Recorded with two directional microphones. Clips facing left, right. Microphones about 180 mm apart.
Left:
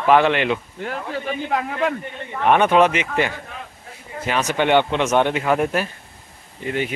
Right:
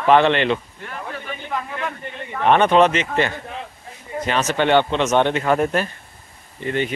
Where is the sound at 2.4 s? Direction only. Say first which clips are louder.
Right 1 dB; 10° left (ahead or behind).